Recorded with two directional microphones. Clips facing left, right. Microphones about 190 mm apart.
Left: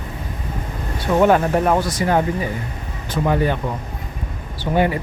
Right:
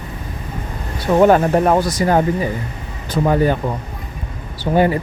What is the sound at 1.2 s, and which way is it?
Speech, 40° right (ahead or behind).